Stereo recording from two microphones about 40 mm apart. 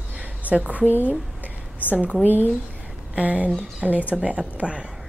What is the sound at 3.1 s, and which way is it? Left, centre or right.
Speech, right.